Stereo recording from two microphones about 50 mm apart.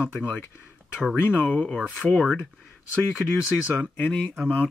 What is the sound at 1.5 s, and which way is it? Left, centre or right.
Speech, left.